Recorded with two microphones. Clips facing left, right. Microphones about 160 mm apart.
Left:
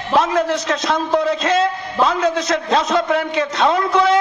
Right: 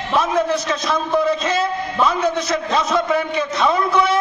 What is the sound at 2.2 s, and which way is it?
A man's voice, 75° left (ahead or behind).